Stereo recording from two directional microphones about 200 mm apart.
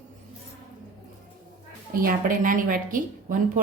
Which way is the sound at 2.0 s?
45° right (ahead or behind).